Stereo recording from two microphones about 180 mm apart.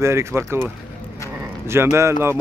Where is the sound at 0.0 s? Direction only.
15° right (ahead or behind).